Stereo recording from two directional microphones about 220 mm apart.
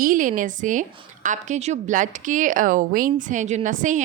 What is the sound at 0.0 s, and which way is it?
A woman's voice, 35° right (ahead or behind).